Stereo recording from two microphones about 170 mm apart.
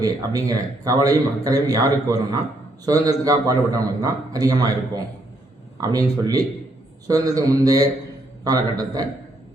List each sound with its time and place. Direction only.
0.0 s a man's voice: 20° right (ahead or behind)
5.8 s a man's voice: 20° right (ahead or behind)